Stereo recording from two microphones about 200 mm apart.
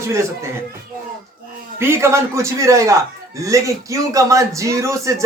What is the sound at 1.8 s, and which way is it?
A man's voice, 15° right (ahead or behind).